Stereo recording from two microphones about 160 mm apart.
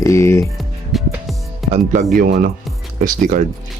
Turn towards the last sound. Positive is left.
turn(degrees=-60)  # may be behind; listen again after turning